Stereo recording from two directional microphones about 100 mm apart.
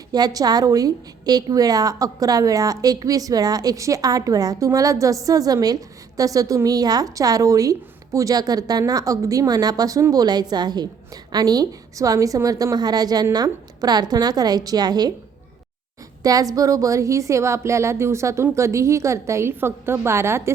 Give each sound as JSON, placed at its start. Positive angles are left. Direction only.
{"t": 0.1, "sound": "a woman's voice", "side_deg": -40}
{"t": 16.2, "sound": "a woman's voice", "side_deg": -35}